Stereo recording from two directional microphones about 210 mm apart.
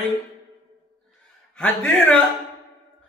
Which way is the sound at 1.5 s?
5° left (ahead or behind).